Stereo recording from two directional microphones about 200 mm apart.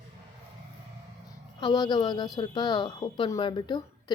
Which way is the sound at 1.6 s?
20° left (ahead or behind).